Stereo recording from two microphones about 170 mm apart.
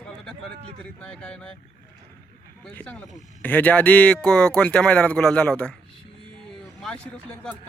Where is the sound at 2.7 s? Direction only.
5° left (ahead or behind).